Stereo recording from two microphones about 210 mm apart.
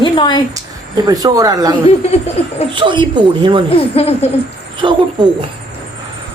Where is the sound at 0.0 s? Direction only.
20° left (ahead or behind).